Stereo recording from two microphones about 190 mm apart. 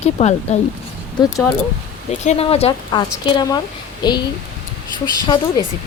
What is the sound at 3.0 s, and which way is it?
A woman's voice, 20° left (ahead or behind).